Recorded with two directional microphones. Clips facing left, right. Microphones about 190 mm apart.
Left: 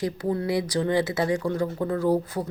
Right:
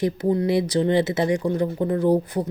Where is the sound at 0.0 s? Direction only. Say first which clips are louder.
Right 5 dB; 20° right (ahead or behind).